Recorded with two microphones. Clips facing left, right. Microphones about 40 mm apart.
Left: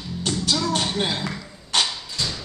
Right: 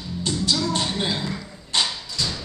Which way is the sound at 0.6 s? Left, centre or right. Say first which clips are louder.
Left 1 dB; left.